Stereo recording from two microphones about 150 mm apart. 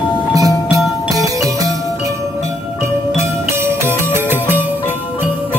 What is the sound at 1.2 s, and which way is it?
Music, 20° right (ahead or behind).